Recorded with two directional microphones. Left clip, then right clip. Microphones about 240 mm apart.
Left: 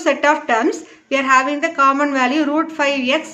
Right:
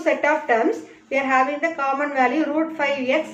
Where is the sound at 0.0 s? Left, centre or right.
Left.